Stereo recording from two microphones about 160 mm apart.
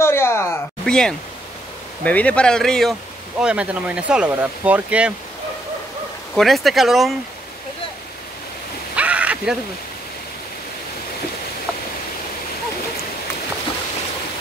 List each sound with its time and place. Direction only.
0.0 s a sound: 15° left (ahead or behind)
0.8 s speech: 5° left (ahead or behind)
6.3 s speech: centre (ahead or behind)
8.9 s rain: 10° right (ahead or behind)